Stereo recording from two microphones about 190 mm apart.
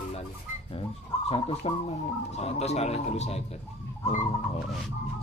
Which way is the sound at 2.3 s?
35° left (ahead or behind).